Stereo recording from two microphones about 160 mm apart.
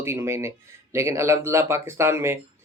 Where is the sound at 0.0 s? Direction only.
15° right (ahead or behind).